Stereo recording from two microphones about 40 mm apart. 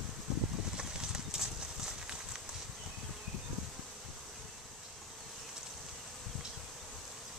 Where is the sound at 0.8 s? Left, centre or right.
Centre.